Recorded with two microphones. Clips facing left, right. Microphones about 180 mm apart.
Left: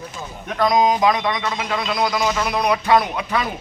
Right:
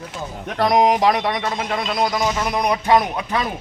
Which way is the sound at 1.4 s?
50° right (ahead or behind).